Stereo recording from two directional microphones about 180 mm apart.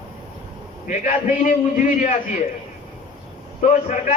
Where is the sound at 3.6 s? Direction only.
45° left (ahead or behind).